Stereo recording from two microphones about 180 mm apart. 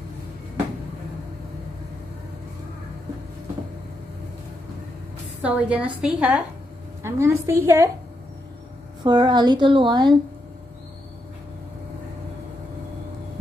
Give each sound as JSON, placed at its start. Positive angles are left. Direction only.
{"t": 5.4, "sound": "a woman's voice", "side_deg": -5}
{"t": 9.0, "sound": "a woman's voice", "side_deg": -25}